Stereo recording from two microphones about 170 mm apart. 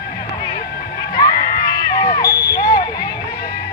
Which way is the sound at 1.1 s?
25° left (ahead or behind).